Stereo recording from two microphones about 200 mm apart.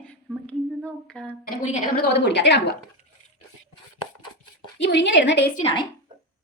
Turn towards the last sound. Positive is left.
turn(degrees=25)  # may be behind; listen again after turning